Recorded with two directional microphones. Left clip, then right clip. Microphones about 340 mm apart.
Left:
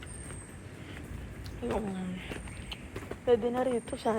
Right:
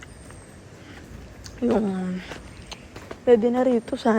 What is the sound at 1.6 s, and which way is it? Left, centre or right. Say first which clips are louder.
Speech: right 11 dB; right.